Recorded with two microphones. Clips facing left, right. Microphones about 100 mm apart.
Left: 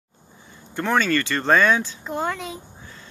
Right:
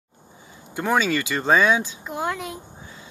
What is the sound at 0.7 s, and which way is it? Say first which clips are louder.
Speech: left 1 dB; 10° right (ahead or behind).